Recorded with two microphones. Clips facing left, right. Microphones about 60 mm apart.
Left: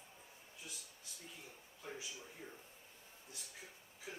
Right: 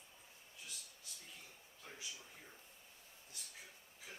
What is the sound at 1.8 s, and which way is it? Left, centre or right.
Speech, centre.